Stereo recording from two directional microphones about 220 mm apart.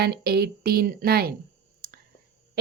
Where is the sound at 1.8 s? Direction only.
45° right (ahead or behind).